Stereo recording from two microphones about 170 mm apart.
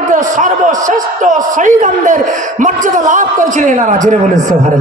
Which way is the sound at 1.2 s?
50° right (ahead or behind).